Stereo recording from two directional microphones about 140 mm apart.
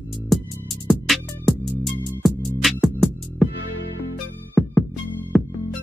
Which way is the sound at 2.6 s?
Centre (ahead or behind).